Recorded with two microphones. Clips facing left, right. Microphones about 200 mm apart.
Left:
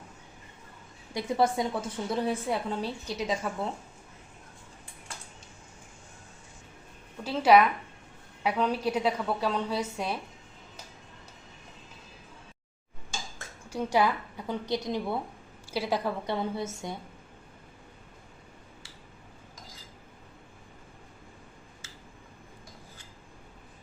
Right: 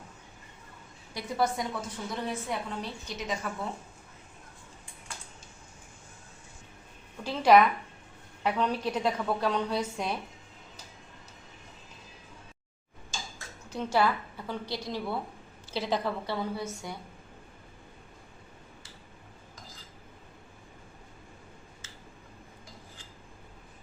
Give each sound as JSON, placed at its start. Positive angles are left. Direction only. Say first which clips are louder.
{"t": 1.1, "sound": "a woman's voice", "louder": "left 3 dB", "side_deg": 25}
{"t": 7.3, "sound": "a woman's voice", "louder": "even", "side_deg": 5}
{"t": 13.7, "sound": "a woman's voice", "louder": "left 1 dB", "side_deg": 15}